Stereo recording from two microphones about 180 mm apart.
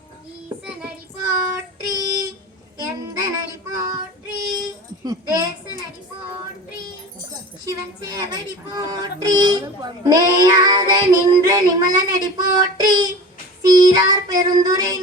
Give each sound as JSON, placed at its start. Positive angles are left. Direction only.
{"t": 1.8, "sound": "child singing", "side_deg": -20}
{"t": 5.0, "sound": "a sound", "side_deg": -20}
{"t": 7.6, "sound": "speech", "side_deg": -20}